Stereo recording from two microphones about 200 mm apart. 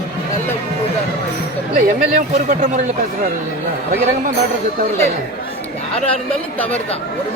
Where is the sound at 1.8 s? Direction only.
40° right (ahead or behind).